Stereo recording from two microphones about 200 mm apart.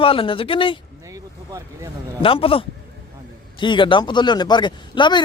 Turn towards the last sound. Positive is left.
turn(degrees=20)  # may be behind; listen again after turning